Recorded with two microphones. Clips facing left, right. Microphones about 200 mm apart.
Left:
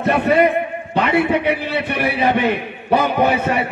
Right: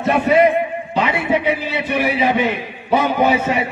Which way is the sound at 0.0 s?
60° left (ahead or behind).